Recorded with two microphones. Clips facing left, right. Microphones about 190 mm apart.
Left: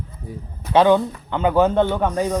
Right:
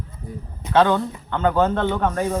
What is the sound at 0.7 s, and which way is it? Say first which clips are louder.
Speech: left 3 dB; 15° left (ahead or behind).